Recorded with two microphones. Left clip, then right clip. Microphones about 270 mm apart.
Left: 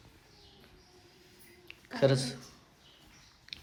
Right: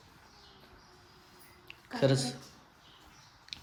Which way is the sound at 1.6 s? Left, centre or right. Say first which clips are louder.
Left 2 dB; centre.